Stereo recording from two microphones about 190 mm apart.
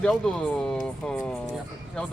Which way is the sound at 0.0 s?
5° left (ahead or behind).